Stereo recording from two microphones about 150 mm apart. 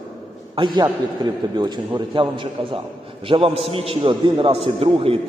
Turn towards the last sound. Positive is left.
turn(degrees=-40)  # may be behind; listen again after turning